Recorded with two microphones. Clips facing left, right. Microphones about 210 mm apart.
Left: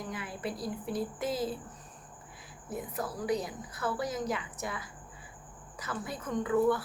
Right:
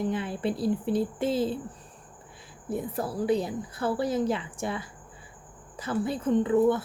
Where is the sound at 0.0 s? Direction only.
30° right (ahead or behind).